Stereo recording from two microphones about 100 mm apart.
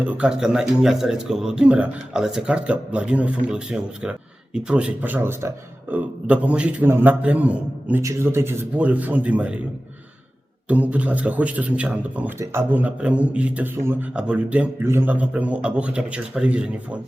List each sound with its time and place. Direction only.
0.0 s speech: 10° right (ahead or behind)
8.0 s speech: 25° right (ahead or behind)
10.7 s speech: 15° right (ahead or behind)
12.4 s speech: 25° right (ahead or behind)